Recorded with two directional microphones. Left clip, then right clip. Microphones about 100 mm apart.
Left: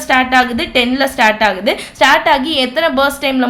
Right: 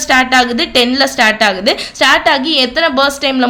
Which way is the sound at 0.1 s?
35° right (ahead or behind).